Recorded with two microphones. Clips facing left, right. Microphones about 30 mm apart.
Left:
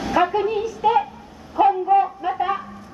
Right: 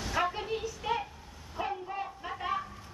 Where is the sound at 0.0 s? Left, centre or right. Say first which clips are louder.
Left 13 dB; left.